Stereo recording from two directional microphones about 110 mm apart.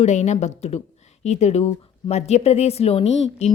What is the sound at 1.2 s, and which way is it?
A woman's voice, 90° left.